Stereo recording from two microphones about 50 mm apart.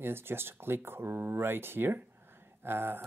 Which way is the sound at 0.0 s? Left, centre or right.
Right.